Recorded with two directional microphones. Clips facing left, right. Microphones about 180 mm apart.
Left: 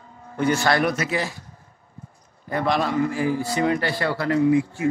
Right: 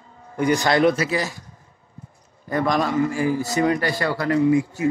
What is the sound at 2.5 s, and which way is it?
A man's voice, 45° right (ahead or behind).